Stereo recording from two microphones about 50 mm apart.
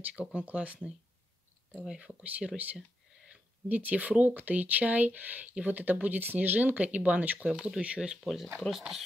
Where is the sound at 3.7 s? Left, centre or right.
Right.